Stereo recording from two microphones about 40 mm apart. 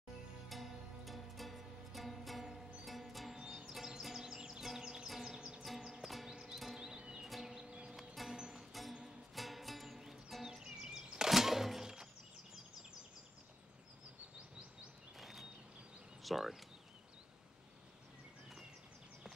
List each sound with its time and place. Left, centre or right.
0.5 s music: centre
3.3 s music: centre
3.7 s music: centre
5.4 s music: right
5.9 s music: centre
7.2 s music: centre
7.6 s music: right
8.1 s music: centre
15.1 s a sound: centre
16.2 s speech: centre